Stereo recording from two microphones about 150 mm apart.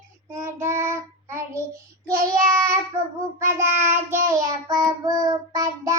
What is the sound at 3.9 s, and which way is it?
Child singing, 20° right (ahead or behind).